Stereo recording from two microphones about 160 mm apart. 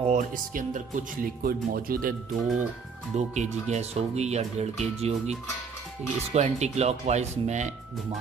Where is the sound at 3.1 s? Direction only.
45° right (ahead or behind).